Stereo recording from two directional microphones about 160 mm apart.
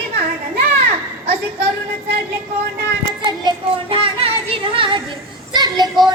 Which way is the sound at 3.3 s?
30° right (ahead or behind).